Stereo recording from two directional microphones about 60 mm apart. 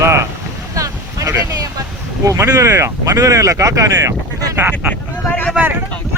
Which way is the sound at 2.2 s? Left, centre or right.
Right.